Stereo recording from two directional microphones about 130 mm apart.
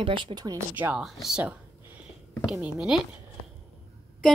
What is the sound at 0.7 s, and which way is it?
Speech, 15° right (ahead or behind).